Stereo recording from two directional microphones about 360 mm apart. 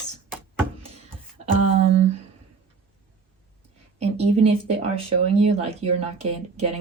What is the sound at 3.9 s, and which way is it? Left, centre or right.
Speech, centre.